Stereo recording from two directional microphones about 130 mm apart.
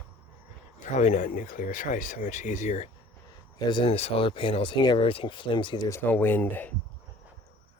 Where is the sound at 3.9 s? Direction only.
50° left (ahead or behind).